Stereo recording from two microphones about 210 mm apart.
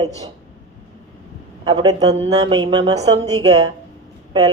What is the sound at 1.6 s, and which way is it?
A woman's voice, 20° right (ahead or behind).